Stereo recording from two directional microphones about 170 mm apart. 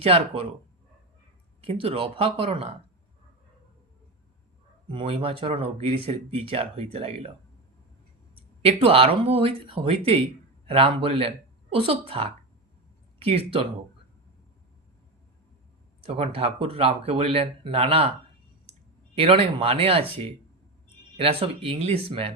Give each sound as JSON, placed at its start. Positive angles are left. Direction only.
{"t": 0.0, "sound": "speech", "side_deg": -35}
{"t": 1.8, "sound": "speech", "side_deg": -35}
{"t": 4.9, "sound": "speech", "side_deg": -30}
{"t": 8.6, "sound": "speech", "side_deg": -35}
{"t": 16.0, "sound": "speech", "side_deg": -35}
{"t": 19.1, "sound": "speech", "side_deg": -35}